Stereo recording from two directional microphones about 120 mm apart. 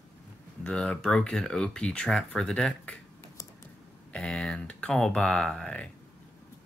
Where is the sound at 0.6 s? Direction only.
10° left (ahead or behind).